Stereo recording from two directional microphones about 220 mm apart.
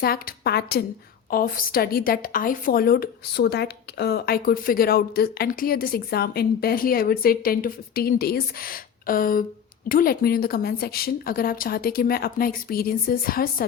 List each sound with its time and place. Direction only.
0.0 s a woman's voice: 45° left (ahead or behind)